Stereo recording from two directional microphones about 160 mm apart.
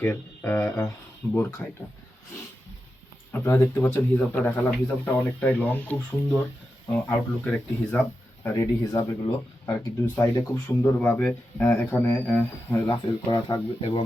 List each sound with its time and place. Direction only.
0.0 s speech: 15° left (ahead or behind)
3.3 s speech: 15° left (ahead or behind)
13.2 s speech: 25° left (ahead or behind)